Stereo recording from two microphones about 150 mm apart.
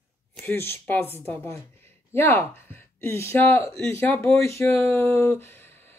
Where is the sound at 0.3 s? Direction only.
15° left (ahead or behind).